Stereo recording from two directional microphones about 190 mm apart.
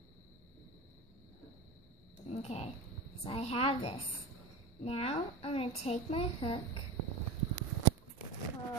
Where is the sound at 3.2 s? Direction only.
30° left (ahead or behind).